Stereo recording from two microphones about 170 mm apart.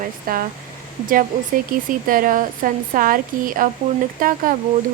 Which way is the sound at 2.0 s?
55° right (ahead or behind).